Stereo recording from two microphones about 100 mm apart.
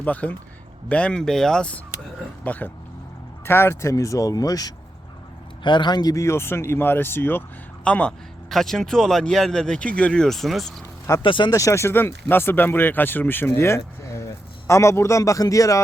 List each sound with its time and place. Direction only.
0.0 s speech: 15° left (ahead or behind); by 4.7 s 40° left (ahead or behind)
5.6 s speech: 50° left (ahead or behind)
6.2 s speech: 25° left (ahead or behind)
7.9 s speech: 10° left (ahead or behind)
11.2 s speech: 55° left (ahead or behind)
11.5 s speech: 30° left (ahead or behind)
13.6 s a sound: 25° left (ahead or behind)
14.7 s speech: 30° left (ahead or behind)